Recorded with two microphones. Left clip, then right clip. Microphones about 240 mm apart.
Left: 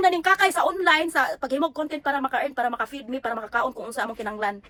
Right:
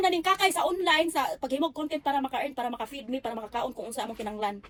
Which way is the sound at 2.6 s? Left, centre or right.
Centre.